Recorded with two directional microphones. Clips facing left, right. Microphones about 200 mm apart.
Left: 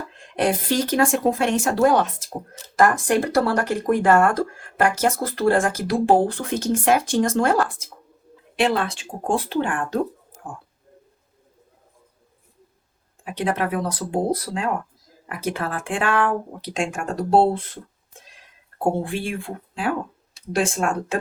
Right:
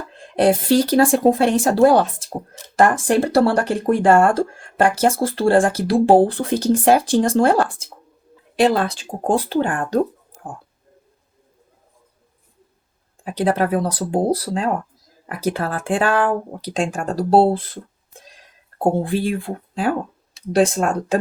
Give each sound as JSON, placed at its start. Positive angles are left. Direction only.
{"t": 0.1, "sound": "speech", "side_deg": -35}
{"t": 13.2, "sound": "speech", "side_deg": -35}